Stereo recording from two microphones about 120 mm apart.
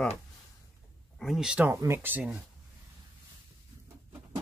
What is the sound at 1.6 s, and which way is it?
Speech, 25° right (ahead or behind).